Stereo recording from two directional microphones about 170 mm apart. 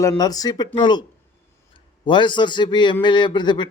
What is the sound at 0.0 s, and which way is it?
A man's voice, 20° left (ahead or behind).